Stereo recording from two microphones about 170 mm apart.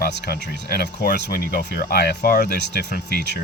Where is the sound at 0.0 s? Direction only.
75° left (ahead or behind).